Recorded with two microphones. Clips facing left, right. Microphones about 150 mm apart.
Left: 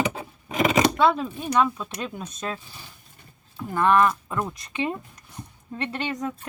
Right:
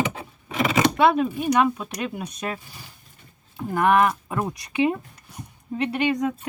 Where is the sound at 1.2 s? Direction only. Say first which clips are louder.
Right 3 dB; 10° right (ahead or behind).